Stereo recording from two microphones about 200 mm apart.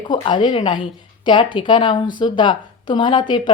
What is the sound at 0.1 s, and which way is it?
Speech, 25° left (ahead or behind).